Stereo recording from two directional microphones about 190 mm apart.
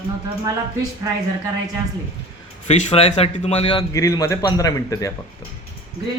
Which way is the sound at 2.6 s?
35° left (ahead or behind).